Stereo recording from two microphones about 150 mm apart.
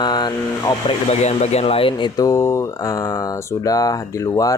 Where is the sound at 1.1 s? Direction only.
45° left (ahead or behind).